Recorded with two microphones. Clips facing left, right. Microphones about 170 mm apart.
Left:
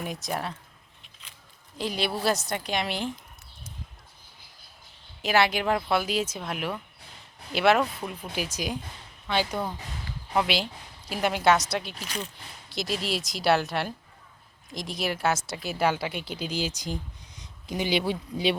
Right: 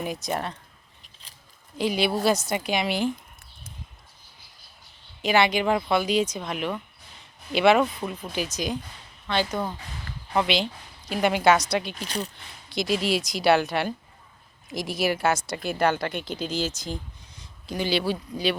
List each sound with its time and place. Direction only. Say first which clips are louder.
0.0 s a woman's voice: right 3 dB; centre (ahead or behind)
1.8 s a woman's voice: right 5 dB; centre (ahead or behind)
5.2 s a woman's voice: right 2 dB; 5° left (ahead or behind)
12.0 s speech: right 4 dB; 35° right (ahead or behind)
12.6 s a woman's voice: right 5 dB; centre (ahead or behind); by 18.5 s 20° left (ahead or behind)